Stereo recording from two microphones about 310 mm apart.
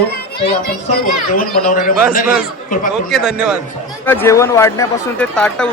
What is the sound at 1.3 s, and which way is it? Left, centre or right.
Speech, left.